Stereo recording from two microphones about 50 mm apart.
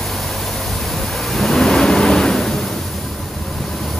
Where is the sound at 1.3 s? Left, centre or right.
Centre.